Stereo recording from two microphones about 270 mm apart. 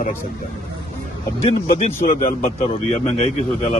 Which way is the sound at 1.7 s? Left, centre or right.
Left.